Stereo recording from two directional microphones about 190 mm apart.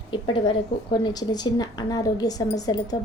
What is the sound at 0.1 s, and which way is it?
A woman's voice, 25° left (ahead or behind).